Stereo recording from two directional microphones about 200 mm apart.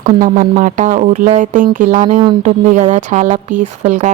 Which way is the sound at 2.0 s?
25° right (ahead or behind).